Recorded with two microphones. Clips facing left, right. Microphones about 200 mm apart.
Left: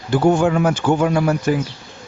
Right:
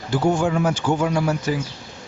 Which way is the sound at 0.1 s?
60° left (ahead or behind).